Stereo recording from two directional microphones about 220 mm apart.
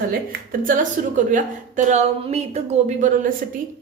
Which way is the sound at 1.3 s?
35° right (ahead or behind).